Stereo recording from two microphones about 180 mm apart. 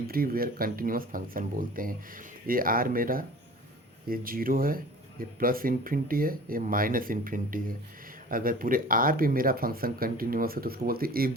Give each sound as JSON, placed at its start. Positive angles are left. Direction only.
{"t": 0.1, "sound": "speech", "side_deg": -55}